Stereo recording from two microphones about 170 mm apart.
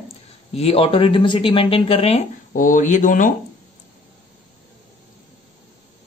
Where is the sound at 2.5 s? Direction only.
50° left (ahead or behind).